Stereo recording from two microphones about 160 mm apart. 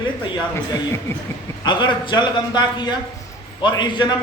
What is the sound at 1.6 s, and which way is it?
Speech, 30° left (ahead or behind).